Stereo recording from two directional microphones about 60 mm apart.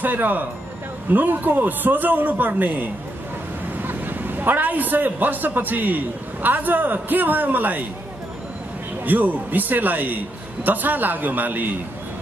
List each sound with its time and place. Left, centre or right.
0.0 s a man's voice: right
9.0 s a man's voice: right